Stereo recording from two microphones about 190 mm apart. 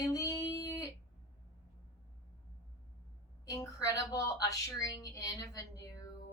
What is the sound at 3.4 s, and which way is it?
A woman's voice, 20° left (ahead or behind).